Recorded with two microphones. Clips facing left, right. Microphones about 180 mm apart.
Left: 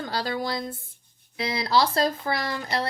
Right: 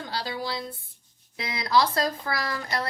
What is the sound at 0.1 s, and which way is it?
Speech, 50° left (ahead or behind).